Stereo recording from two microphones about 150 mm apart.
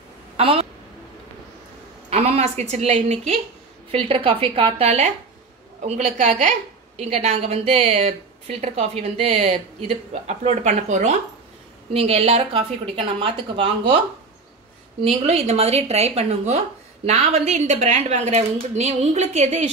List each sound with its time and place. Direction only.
0.4 s a woman's voice: 40° right (ahead or behind)
2.0 s a sound: 45° right (ahead or behind)
2.7 s a woman's voice: 45° right (ahead or behind)